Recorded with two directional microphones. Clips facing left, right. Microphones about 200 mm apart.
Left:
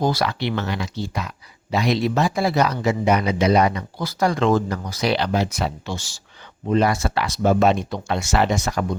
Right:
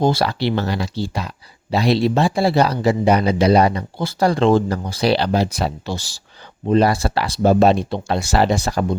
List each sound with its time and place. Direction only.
0.0 s speech: 30° right (ahead or behind)